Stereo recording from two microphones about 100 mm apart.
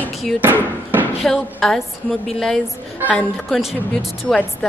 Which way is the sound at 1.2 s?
5° left (ahead or behind).